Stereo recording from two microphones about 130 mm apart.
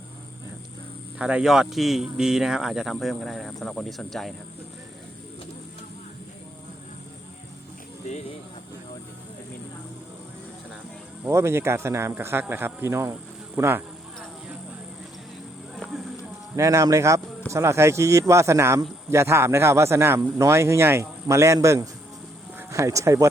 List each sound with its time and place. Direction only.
1.2 s speech: 5° right (ahead or behind)
11.3 s speech: 20° right (ahead or behind)
15.7 s a sound: centre (ahead or behind)
16.6 s speech: 25° right (ahead or behind)